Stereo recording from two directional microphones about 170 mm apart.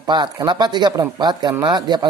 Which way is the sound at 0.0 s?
25° right (ahead or behind).